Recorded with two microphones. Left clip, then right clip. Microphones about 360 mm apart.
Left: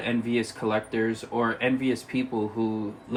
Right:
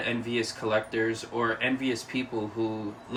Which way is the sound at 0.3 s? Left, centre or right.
Centre.